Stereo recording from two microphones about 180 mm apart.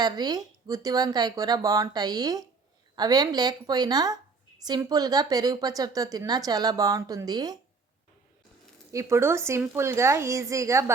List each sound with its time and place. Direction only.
0.0 s a woman's voice: 20° right (ahead or behind)
8.9 s speech: 15° right (ahead or behind)